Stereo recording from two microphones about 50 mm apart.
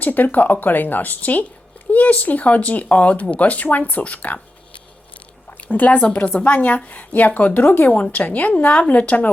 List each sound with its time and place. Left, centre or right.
0.0 s a woman's voice: left
5.5 s a woman's voice: left